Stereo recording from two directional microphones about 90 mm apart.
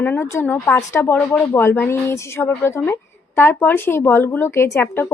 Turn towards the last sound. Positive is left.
turn(degrees=25)  # may be behind; listen again after turning